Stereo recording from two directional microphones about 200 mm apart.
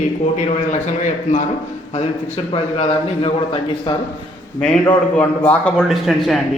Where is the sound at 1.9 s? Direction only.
30° left (ahead or behind).